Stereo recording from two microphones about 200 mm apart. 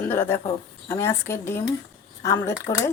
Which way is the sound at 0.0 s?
10° left (ahead or behind).